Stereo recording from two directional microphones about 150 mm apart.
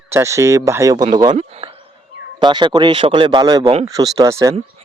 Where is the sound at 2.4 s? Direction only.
30° right (ahead or behind).